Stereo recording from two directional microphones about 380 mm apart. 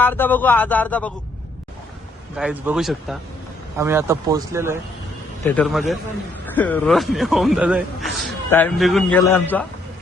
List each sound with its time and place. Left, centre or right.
0.0 s a man's voice: centre
2.3 s a man's voice: centre